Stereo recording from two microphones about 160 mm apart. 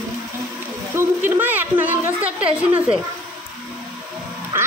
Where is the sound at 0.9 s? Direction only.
10° right (ahead or behind).